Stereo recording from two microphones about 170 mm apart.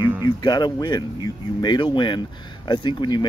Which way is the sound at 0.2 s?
25° left (ahead or behind).